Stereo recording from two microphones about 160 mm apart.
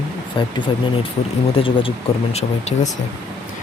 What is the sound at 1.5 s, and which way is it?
Speech, 35° left (ahead or behind).